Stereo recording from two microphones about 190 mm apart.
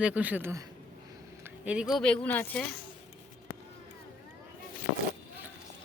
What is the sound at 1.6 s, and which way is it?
Speech, 5° right (ahead or behind).